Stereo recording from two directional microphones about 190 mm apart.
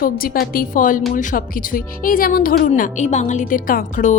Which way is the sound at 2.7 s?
40° left (ahead or behind).